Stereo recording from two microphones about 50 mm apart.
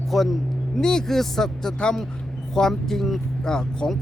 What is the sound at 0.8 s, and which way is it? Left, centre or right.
Speech, centre.